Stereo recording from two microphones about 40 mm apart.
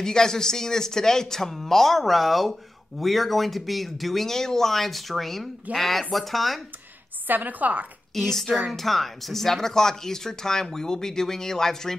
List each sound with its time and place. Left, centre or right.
0.0 s speech: centre
7.2 s a woman's voice: right
8.1 s a woman's voice: centre